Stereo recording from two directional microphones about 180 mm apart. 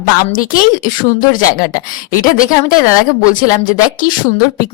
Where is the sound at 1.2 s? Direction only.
50° left (ahead or behind).